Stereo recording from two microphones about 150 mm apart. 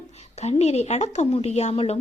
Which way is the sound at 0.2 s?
45° left (ahead or behind).